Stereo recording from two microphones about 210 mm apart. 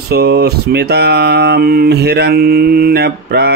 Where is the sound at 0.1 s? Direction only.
50° right (ahead or behind).